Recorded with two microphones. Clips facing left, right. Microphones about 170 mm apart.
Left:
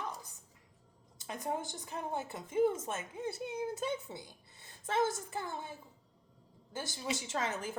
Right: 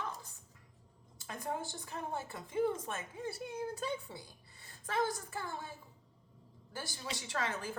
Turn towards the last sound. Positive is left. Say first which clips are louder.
# left 2 dB
turn(degrees=20)  # may be behind; listen again after turning